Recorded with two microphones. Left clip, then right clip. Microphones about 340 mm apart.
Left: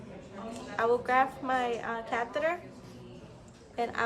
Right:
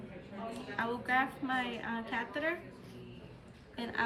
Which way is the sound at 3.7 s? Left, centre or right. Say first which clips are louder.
Left 5 dB; centre.